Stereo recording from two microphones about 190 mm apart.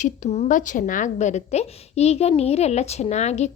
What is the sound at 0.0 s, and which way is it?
A woman's voice, 35° left (ahead or behind).